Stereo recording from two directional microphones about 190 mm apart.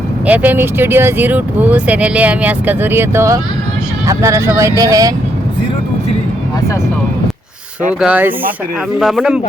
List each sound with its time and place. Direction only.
0.3 s speech: 10° right (ahead or behind)
8.0 s speech: 10° right (ahead or behind)